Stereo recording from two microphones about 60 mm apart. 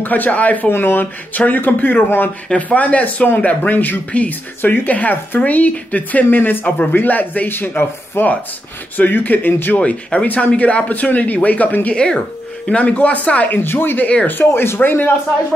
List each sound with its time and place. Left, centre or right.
0.0 s speech: left
2.5 s speech: left
9.8 s speech: left
11.9 s speech: centre
13.6 s speech: left
14.0 s speech: left
14.4 s speech: left